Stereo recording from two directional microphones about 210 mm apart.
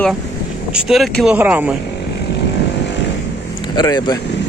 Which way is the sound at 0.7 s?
Centre (ahead or behind).